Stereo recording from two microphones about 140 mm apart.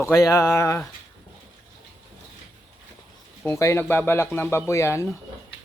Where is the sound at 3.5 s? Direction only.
20° left (ahead or behind).